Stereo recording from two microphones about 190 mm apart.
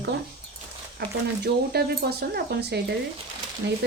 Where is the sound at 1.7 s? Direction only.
55° right (ahead or behind).